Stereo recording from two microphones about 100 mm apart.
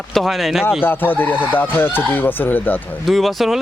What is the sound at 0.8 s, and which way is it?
Speech, 20° left (ahead or behind).